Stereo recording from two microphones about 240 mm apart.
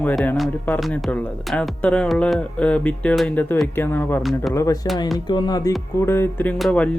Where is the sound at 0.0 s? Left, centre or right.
Centre.